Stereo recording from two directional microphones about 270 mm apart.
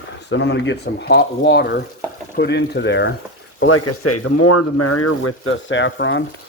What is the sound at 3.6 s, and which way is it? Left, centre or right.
Speech, left.